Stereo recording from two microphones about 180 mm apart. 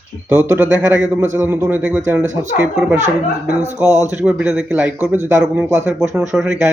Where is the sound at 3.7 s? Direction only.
15° right (ahead or behind).